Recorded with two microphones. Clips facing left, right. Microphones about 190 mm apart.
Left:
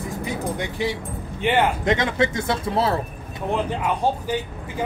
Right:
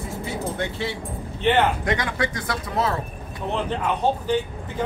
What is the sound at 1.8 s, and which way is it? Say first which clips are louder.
Speech: left 4 dB; 25° left (ahead or behind).